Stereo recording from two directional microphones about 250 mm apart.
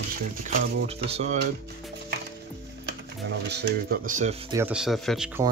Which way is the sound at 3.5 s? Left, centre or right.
Right.